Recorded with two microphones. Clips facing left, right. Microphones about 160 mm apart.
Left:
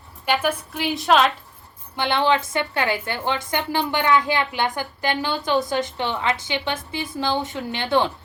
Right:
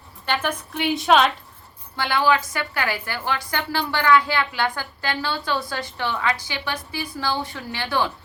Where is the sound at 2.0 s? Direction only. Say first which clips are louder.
Left 1 dB; 25° left (ahead or behind).